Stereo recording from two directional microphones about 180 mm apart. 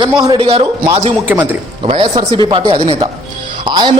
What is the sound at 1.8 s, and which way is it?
A man's voice, 30° right (ahead or behind).